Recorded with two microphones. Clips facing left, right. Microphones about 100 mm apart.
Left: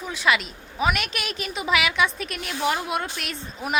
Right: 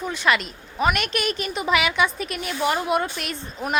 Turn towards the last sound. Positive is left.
turn(degrees=0)  # may be behind; listen again after turning